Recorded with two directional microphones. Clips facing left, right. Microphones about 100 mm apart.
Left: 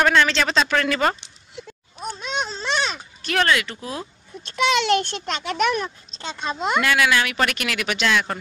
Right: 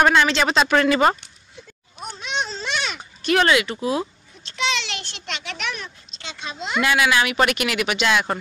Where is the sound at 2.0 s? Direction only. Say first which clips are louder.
Left 1 dB; 40° left (ahead or behind).